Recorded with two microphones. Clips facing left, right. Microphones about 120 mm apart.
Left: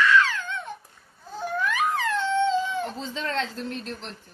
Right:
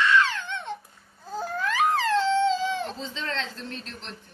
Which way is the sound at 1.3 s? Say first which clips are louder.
Left 1 dB; 35° right (ahead or behind).